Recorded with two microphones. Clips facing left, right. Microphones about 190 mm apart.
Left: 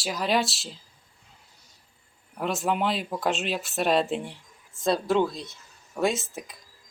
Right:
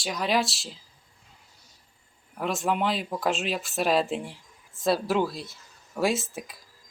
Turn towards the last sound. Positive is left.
turn(degrees=-5)  # may be behind; listen again after turning